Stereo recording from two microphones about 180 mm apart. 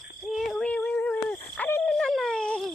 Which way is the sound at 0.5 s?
5° left (ahead or behind).